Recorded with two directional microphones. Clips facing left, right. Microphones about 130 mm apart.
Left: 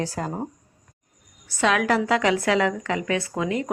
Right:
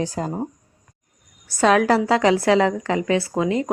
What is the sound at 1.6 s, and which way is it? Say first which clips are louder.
A woman's voice: right 5 dB; 35° right (ahead or behind).